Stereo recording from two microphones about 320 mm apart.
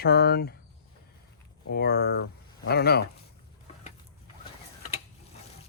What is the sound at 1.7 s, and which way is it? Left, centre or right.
Speech, left.